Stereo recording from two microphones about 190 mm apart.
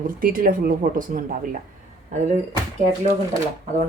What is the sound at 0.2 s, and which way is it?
Speech, 50° right (ahead or behind).